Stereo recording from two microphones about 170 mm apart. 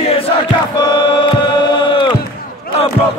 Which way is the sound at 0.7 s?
25° left (ahead or behind).